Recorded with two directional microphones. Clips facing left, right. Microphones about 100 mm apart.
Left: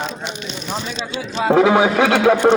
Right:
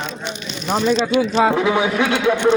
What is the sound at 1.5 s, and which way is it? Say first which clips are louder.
Speech: left 5 dB; 60° left (ahead or behind).